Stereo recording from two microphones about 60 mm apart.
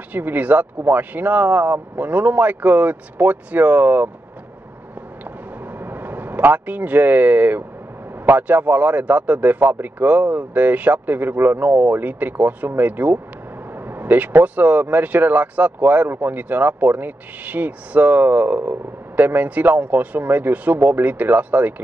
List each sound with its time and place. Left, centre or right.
0.1 s speech: right
5.7 s vehicle: right
8.3 s speech: right